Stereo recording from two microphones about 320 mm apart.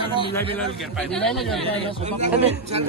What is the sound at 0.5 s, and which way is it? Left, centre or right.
Speech, centre.